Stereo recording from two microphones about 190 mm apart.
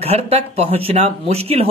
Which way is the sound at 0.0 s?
30° right (ahead or behind).